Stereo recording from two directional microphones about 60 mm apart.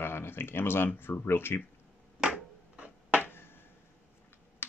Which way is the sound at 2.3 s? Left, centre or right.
Right.